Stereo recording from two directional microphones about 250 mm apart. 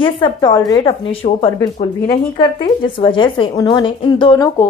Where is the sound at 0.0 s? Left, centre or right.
Centre.